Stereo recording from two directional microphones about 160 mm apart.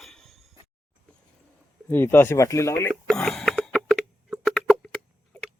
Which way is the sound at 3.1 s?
Centre (ahead or behind).